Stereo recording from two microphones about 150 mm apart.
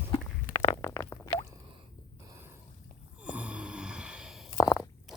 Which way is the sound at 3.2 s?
10° right (ahead or behind).